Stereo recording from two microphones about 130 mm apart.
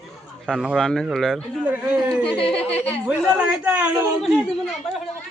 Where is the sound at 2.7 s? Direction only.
50° left (ahead or behind).